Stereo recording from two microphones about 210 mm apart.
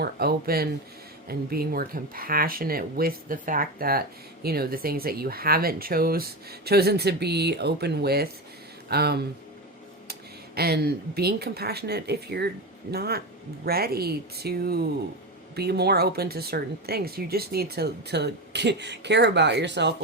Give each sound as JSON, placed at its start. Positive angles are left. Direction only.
{"t": 0.0, "sound": "speech", "side_deg": -45}